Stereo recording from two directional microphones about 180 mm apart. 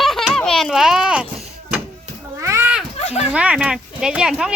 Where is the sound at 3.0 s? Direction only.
35° left (ahead or behind).